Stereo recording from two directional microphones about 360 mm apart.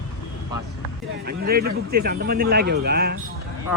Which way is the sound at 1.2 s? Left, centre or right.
Right.